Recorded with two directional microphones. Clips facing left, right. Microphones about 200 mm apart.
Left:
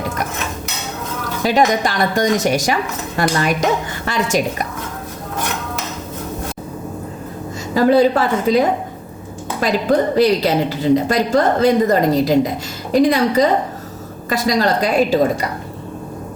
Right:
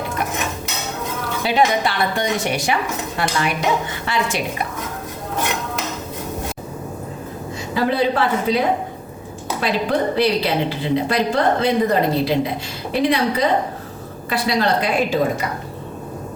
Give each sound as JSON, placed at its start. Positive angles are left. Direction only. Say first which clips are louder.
{"t": 1.5, "sound": "a woman's voice", "louder": "left 3 dB", "side_deg": 45}
{"t": 3.2, "sound": "dishes", "louder": "left 6 dB", "side_deg": 45}
{"t": 7.7, "sound": "dishes", "louder": "left 6 dB", "side_deg": 40}
{"t": 10.2, "sound": "a woman's voice", "louder": "left 4 dB", "side_deg": 40}